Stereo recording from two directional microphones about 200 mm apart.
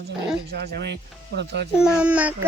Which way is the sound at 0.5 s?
55° right (ahead or behind).